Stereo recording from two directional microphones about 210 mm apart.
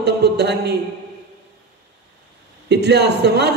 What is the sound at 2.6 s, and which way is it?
Speech, 55° right (ahead or behind).